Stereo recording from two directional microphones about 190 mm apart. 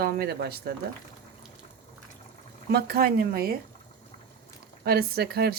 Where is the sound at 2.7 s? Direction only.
55° right (ahead or behind).